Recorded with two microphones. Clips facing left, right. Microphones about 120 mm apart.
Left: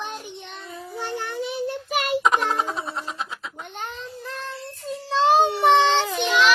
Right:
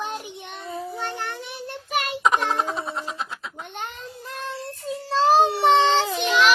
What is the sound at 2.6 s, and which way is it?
Baby laughter, centre (ahead or behind).